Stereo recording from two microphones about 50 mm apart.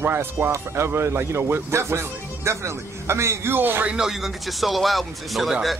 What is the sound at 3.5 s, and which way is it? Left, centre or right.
Speech, right.